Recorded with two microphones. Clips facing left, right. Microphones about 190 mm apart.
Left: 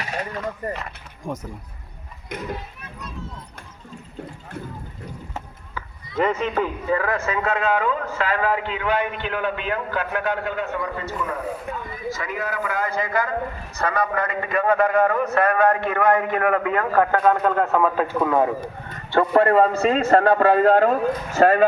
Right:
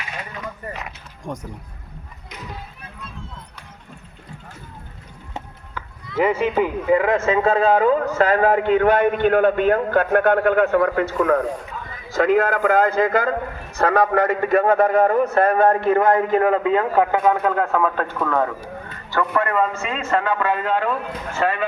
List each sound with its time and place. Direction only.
0.0 s a sound: 40° left (ahead or behind)
0.7 s speech: centre (ahead or behind)
6.1 s a man's voice: 10° right (ahead or behind); by 14.2 s 50° right (ahead or behind)
14.3 s a man's voice: 40° right (ahead or behind); by 17.3 s 15° right (ahead or behind)
17.3 s a man's voice: centre (ahead or behind); by 18.5 s 15° left (ahead or behind)
19.1 s a man's voice: 30° left (ahead or behind)